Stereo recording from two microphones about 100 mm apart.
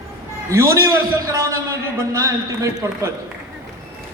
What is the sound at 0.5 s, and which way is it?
A man's voice, 30° right (ahead or behind).